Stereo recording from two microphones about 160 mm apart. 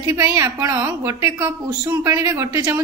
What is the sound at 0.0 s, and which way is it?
A woman's voice, 15° right (ahead or behind).